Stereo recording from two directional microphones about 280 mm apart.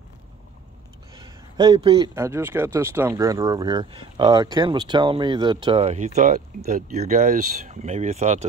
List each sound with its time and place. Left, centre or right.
1.1 s a man's voice: centre